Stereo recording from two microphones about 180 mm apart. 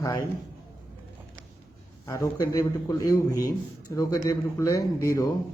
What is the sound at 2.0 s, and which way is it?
A man's voice, 20° left (ahead or behind).